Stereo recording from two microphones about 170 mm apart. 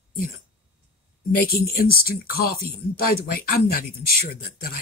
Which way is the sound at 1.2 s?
60° left (ahead or behind).